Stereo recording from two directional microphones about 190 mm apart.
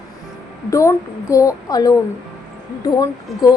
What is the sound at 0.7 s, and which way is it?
A woman's voice, 15° left (ahead or behind).